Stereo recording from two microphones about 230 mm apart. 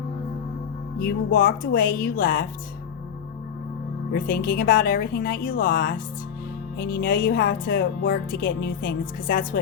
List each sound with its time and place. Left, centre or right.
0.9 s speech: left
4.1 s speech: left